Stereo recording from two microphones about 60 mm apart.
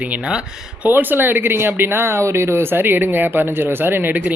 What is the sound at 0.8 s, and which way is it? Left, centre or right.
Speech, right.